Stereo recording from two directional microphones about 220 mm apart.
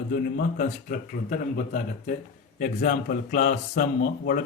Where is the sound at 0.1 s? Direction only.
40° left (ahead or behind).